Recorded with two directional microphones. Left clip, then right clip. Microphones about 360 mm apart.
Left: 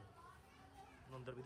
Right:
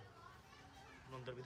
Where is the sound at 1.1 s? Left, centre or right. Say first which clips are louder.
Right 2 dB; centre.